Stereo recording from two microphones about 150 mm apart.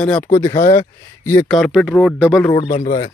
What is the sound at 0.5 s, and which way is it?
Speech, 55° left (ahead or behind).